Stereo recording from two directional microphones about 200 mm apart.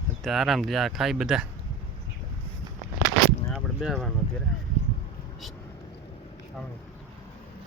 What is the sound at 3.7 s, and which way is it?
Speech, centre (ahead or behind).